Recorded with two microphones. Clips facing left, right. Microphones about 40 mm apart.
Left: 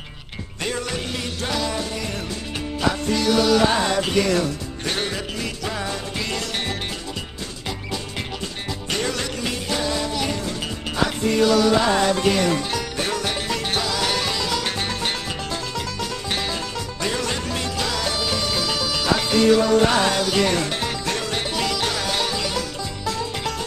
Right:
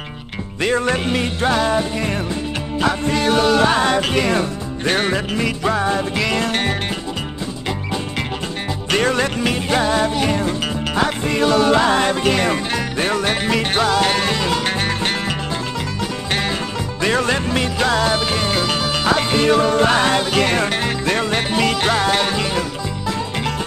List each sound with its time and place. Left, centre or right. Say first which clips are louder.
0.6 s music: right 9 dB; right
6.1 s music: right 7 dB; right
6.4 s music: right 7 dB; right
8.9 s music: right 8 dB; right
17.0 s music: right 8 dB; right